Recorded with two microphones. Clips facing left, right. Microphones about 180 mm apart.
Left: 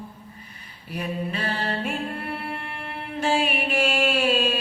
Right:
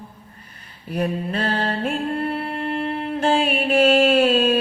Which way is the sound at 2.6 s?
45° right (ahead or behind).